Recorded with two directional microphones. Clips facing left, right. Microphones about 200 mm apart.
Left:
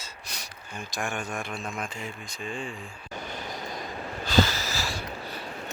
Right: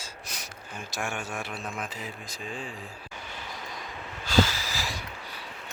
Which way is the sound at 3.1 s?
40° left (ahead or behind).